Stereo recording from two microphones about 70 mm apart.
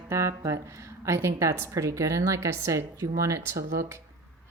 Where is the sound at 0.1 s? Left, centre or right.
Right.